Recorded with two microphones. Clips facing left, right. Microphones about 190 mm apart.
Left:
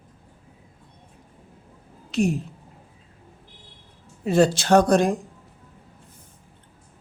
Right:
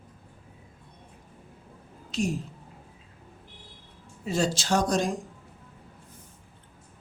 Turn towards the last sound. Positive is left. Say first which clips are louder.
# left 8 dB
turn(degrees=60)  # may be behind; listen again after turning